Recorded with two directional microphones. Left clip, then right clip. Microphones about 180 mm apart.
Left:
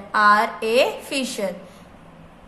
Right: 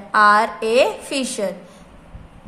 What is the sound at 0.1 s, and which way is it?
A woman's voice, 20° right (ahead or behind).